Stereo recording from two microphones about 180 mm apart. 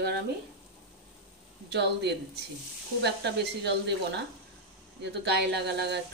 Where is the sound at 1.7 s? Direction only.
70° right (ahead or behind).